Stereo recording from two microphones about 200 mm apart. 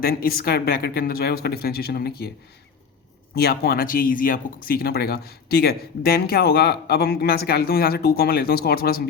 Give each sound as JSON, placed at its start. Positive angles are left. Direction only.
{"t": 0.0, "sound": "speech", "side_deg": 50}
{"t": 3.3, "sound": "speech", "side_deg": 50}